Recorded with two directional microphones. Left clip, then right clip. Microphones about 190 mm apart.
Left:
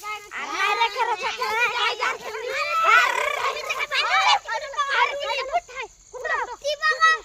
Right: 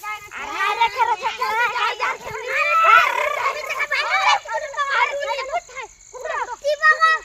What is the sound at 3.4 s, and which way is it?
Fowl, 40° left (ahead or behind).